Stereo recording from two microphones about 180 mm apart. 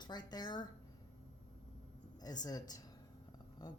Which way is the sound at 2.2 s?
20° left (ahead or behind).